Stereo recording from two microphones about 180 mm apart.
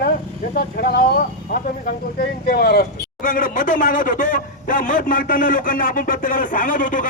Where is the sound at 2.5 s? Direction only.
60° left (ahead or behind).